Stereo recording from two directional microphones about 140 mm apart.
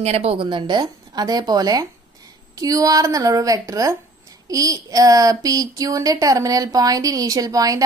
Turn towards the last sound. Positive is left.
turn(degrees=-25)  # may be behind; listen again after turning